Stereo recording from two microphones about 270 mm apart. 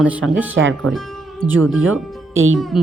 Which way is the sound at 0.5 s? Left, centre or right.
Right.